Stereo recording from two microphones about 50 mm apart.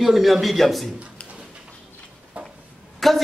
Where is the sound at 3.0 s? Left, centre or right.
Centre.